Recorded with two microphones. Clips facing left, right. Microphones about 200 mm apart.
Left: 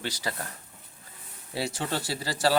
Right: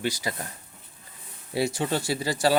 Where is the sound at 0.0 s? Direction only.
15° right (ahead or behind).